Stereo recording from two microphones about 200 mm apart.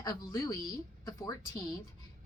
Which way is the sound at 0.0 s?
20° left (ahead or behind).